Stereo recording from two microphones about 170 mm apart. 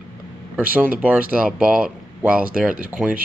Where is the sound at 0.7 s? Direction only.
10° right (ahead or behind).